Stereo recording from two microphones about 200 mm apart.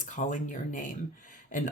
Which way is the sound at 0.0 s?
40° left (ahead or behind).